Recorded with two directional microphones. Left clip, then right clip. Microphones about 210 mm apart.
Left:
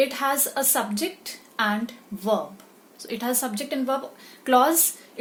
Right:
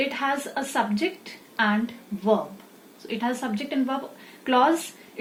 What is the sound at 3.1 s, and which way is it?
A woman's voice, 45° left (ahead or behind).